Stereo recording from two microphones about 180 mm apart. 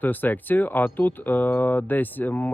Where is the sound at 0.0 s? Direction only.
10° left (ahead or behind).